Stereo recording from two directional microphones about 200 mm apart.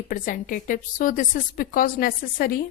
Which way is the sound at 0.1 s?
45° left (ahead or behind).